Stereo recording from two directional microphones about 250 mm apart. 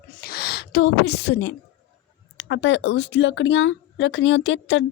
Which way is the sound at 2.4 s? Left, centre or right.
Left.